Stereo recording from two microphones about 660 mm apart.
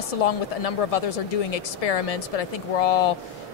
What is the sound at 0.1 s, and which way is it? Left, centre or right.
Speech, left.